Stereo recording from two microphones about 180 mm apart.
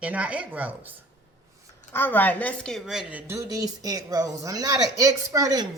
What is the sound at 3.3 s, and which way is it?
Speech, 20° right (ahead or behind).